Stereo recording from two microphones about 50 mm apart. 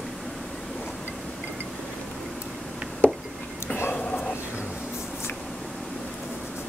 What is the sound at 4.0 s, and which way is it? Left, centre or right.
Dog, left.